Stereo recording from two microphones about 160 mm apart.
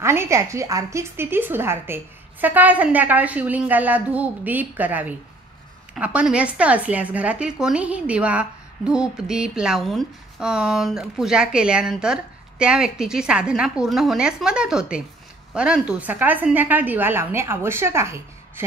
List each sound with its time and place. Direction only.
0.0 s a woman's voice: 15° right (ahead or behind)